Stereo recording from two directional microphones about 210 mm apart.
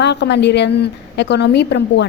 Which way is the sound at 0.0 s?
55° left (ahead or behind).